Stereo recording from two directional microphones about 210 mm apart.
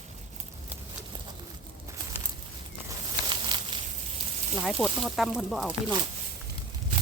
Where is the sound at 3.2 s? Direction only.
20° right (ahead or behind).